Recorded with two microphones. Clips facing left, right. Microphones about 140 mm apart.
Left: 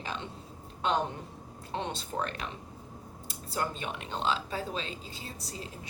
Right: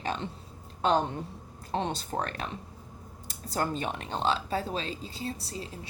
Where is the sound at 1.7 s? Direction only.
40° right (ahead or behind).